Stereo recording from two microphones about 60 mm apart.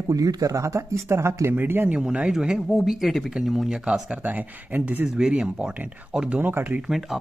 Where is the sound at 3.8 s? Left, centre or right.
Centre.